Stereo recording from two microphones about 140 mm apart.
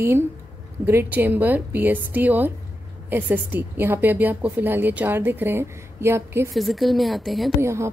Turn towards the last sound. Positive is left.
turn(degrees=-20)  # may be behind; listen again after turning